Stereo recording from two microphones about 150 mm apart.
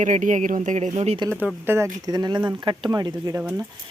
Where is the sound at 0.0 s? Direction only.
55° right (ahead or behind).